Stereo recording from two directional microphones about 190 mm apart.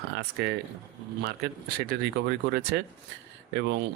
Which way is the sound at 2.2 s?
60° right (ahead or behind).